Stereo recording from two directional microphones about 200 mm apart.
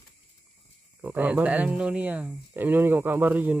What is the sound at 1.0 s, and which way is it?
Speech, 10° right (ahead or behind).